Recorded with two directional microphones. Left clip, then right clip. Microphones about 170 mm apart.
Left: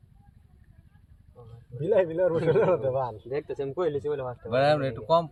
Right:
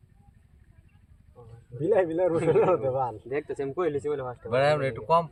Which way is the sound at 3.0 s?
Centre (ahead or behind).